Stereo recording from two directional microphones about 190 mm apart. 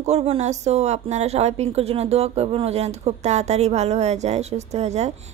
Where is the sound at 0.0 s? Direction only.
35° right (ahead or behind).